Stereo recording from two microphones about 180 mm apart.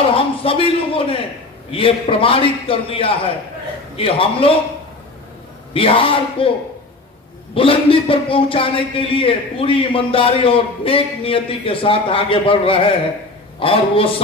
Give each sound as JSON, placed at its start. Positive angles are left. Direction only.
{"t": 0.1, "sound": "a man's voice", "side_deg": 30}
{"t": 5.7, "sound": "speech", "side_deg": 30}
{"t": 7.5, "sound": "speech", "side_deg": 30}